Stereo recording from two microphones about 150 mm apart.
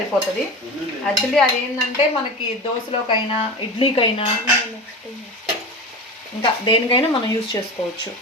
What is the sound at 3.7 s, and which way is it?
Speech, 40° left (ahead or behind).